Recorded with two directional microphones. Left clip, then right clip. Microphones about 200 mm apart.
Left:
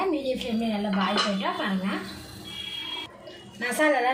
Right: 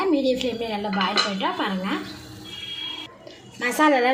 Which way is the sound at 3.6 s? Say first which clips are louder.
Right 4 dB; 40° right (ahead or behind).